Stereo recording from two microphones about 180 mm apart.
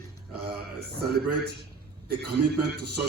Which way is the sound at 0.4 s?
60° right (ahead or behind).